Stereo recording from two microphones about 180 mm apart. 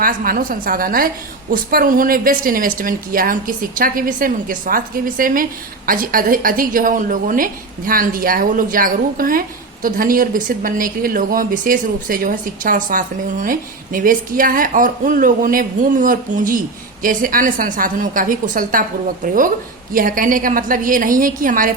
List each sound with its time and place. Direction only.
0.0 s a woman's voice: 50° right (ahead or behind)